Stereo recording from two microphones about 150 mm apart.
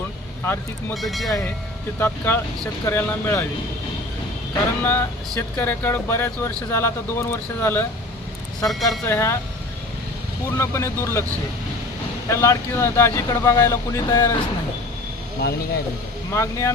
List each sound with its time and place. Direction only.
0.4 s speech: 15° left (ahead or behind)
1.0 s speech: centre (ahead or behind)
2.0 s speech: 15° left (ahead or behind)
4.8 s speech: 15° left (ahead or behind)
8.6 s speech: centre (ahead or behind)
9.0 s speech: 15° left (ahead or behind)
10.6 s speech: 20° left (ahead or behind)
12.3 s speech: 20° left (ahead or behind)
16.3 s speech: 20° left (ahead or behind)